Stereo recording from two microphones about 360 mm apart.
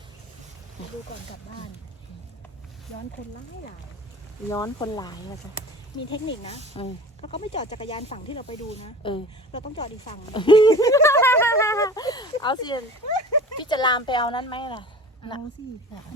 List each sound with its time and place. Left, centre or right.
4.4 s speech: centre
6.4 s speech: centre
13.1 s a sound: left
13.6 s speech: centre